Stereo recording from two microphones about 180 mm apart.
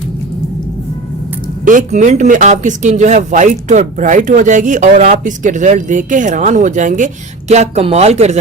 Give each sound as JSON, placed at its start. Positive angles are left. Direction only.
{"t": 1.6, "sound": "speech", "side_deg": -45}